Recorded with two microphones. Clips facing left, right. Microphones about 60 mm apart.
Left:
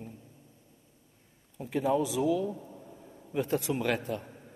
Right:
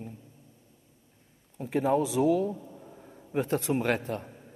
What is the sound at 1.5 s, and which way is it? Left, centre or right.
Speech, right.